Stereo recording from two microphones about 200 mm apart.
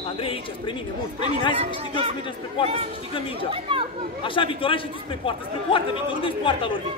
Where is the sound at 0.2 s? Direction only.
25° left (ahead or behind).